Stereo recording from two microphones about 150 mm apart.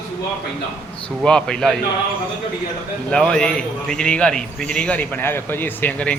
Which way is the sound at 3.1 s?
5° left (ahead or behind).